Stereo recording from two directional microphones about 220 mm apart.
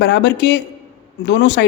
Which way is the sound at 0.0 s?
50° left (ahead or behind).